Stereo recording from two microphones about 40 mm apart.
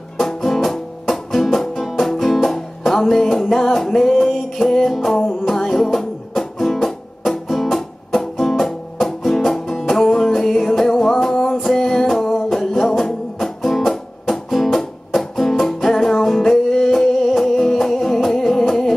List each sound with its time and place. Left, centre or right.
0.2 s music: centre